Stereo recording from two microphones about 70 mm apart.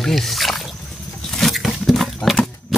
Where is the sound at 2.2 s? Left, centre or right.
Centre.